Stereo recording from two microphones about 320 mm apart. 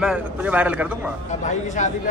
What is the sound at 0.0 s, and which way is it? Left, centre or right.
Speech, centre.